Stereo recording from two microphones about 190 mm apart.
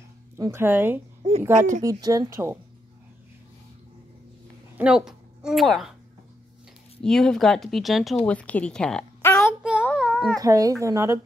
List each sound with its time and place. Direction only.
0.4 s speech: 15° right (ahead or behind)
4.7 s a woman's voice: 5° right (ahead or behind)
7.0 s a woman's voice: 5° left (ahead or behind)
9.6 s child singing: 5° right (ahead or behind)
9.8 s baby cry: centre (ahead or behind)
10.4 s speech: 20° right (ahead or behind)